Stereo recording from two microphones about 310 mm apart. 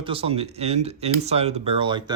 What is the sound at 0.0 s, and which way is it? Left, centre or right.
Speech, centre.